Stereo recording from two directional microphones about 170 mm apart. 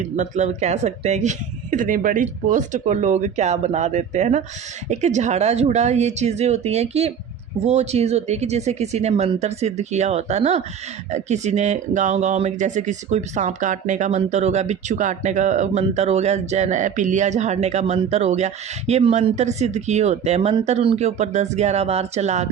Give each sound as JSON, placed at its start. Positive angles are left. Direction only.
{"t": 0.2, "sound": "speech", "side_deg": -45}